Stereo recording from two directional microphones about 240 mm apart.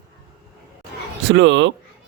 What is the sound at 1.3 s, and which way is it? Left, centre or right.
Speech, right.